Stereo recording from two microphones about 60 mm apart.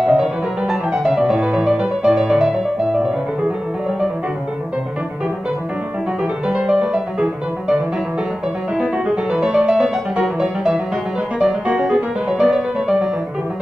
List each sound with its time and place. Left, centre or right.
0.0 s music: centre
6.5 s music: centre